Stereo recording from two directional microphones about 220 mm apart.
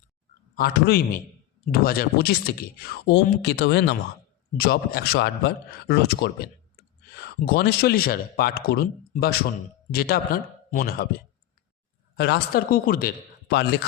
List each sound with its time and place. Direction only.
0.5 s speech: 45° left (ahead or behind)